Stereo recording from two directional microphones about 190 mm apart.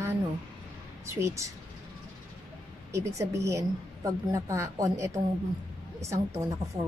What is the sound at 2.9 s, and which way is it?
A woman's voice, 15° right (ahead or behind).